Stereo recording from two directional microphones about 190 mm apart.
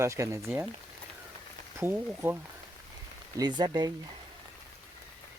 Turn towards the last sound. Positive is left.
turn(degrees=-20)  # may be behind; listen again after turning